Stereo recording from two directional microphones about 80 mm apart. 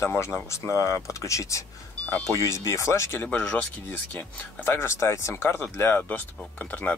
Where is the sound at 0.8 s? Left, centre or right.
Left.